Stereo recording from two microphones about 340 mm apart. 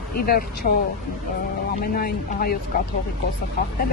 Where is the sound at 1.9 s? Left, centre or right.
Left.